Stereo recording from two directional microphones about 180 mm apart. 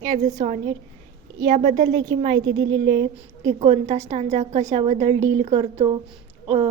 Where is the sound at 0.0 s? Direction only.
45° right (ahead or behind).